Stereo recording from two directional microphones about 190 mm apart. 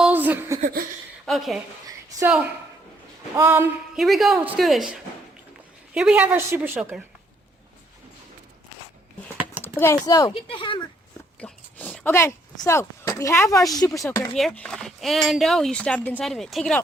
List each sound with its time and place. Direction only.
0.0 s chuckle: 10° right (ahead or behind)
0.6 s laughter: 50° right (ahead or behind)
1.2 s a woman's voice: centre (ahead or behind)
3.3 s a woman's voice: 10° right (ahead or behind)
3.9 s a woman's voice: centre (ahead or behind)
9.7 s speech: 15° left (ahead or behind)
11.3 s speech: 5° left (ahead or behind)
14.3 s speech: centre (ahead or behind)